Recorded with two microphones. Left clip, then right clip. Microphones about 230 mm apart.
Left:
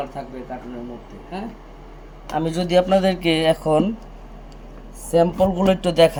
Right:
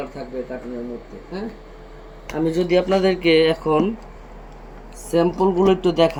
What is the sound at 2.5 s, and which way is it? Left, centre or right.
A man's voice, left.